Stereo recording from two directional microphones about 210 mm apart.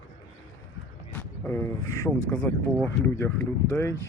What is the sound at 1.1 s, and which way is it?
Speech, 10° left (ahead or behind).